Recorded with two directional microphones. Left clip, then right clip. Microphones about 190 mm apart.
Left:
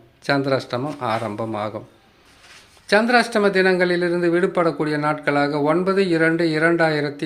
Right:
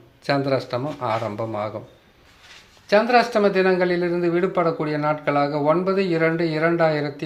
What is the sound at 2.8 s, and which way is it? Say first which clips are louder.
Speech: even; 20° left (ahead or behind).